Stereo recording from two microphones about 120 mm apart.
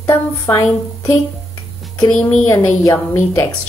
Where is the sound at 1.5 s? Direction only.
15° left (ahead or behind).